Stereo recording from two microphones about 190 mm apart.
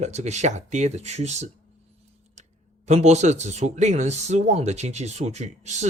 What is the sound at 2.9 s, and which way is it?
Speech, 35° right (ahead or behind).